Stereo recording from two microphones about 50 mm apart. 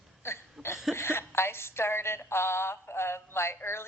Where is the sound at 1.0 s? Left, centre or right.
Left.